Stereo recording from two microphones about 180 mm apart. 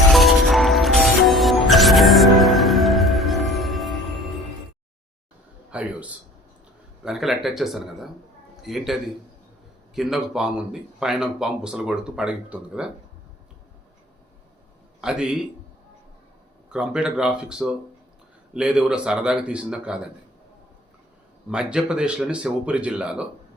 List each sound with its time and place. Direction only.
0.1 s music: centre (ahead or behind)
5.7 s a sound: 5° right (ahead or behind)
7.0 s speech: centre (ahead or behind)
15.0 s speech: 5° right (ahead or behind)
16.6 s speech: 5° right (ahead or behind)
21.5 s speech: 5° right (ahead or behind)